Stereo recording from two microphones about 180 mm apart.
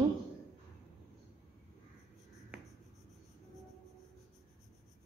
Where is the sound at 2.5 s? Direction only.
5° right (ahead or behind).